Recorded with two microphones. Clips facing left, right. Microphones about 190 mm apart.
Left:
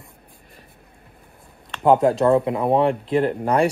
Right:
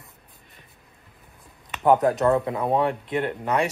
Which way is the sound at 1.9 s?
25° left (ahead or behind).